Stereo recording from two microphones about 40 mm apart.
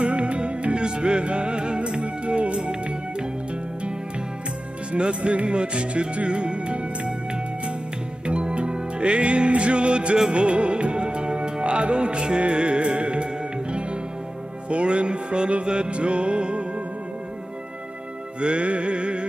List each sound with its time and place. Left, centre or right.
0.0 s music: right
4.9 s music: right
8.3 s music: right
18.4 s music: right